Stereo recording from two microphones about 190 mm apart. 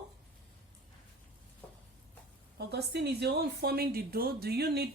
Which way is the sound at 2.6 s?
60° right (ahead or behind).